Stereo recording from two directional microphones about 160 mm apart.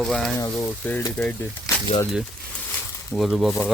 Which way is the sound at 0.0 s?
Centre (ahead or behind).